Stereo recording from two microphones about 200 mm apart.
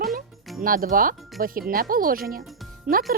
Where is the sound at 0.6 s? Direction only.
45° right (ahead or behind).